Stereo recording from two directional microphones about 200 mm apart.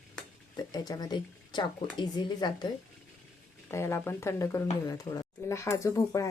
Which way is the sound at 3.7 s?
15° left (ahead or behind).